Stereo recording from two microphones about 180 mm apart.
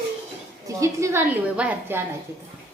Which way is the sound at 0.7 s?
15° right (ahead or behind).